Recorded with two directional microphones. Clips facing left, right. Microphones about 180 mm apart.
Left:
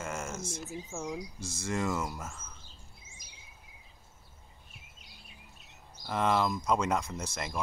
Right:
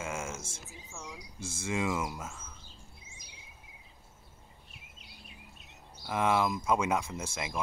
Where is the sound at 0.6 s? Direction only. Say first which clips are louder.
Left 9 dB; 50° left (ahead or behind).